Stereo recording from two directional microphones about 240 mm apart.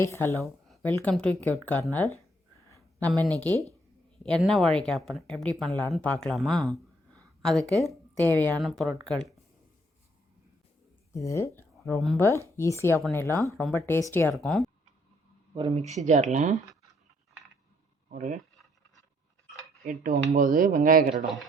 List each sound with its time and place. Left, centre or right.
0.0 s speech: centre
2.6 s a sound: centre
4.2 s speech: centre
11.1 s speech: centre
11.8 s speech: centre
15.5 s speech: right
18.1 s speech: right
19.8 s speech: right